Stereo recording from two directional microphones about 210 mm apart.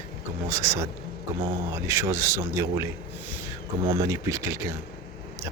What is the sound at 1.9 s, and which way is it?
Speech, 15° right (ahead or behind).